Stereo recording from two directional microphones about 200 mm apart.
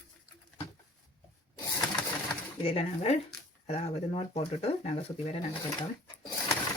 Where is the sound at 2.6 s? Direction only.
30° left (ahead or behind).